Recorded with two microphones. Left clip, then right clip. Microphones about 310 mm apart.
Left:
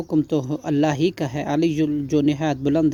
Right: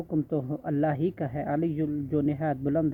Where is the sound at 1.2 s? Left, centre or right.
Left.